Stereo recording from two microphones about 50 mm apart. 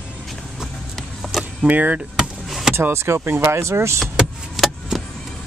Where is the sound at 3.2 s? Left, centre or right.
Right.